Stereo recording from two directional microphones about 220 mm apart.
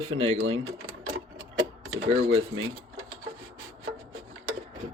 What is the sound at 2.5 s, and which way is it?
Speech, 65° right (ahead or behind).